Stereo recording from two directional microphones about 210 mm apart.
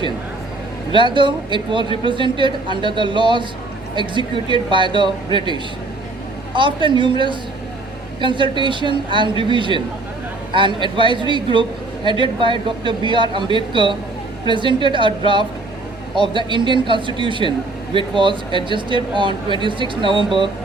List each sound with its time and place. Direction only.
0.9 s speech: 25° right (ahead or behind)